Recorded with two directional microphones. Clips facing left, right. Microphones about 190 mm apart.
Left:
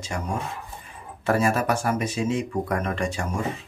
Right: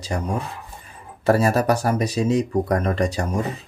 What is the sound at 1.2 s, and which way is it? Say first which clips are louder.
Speech: right 4 dB; 35° right (ahead or behind).